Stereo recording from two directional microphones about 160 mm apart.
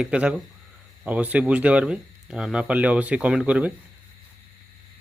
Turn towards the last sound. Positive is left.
turn(degrees=-10)  # may be behind; listen again after turning